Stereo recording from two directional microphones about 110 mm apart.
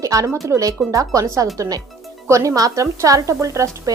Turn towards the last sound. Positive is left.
turn(degrees=-30)  # may be behind; listen again after turning